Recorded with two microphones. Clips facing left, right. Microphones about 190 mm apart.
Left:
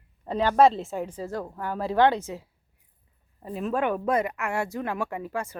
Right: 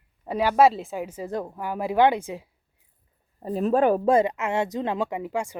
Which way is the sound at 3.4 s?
35° right (ahead or behind).